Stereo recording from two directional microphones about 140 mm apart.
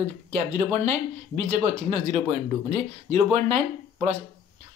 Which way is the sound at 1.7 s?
45° right (ahead or behind).